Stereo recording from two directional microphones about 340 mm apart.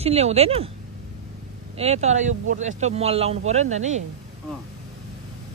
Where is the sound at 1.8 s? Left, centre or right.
Centre.